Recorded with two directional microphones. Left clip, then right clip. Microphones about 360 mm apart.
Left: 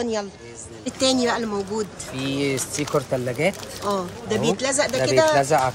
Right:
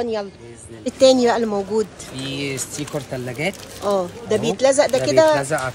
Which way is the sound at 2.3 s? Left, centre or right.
Left.